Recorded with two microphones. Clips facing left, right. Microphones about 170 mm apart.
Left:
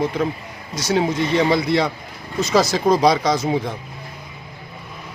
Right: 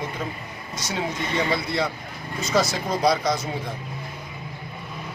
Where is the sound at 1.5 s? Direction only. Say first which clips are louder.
Left 7 dB; 90° left.